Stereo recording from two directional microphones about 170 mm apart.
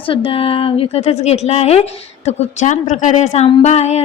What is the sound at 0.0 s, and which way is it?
A woman's voice, 30° left (ahead or behind).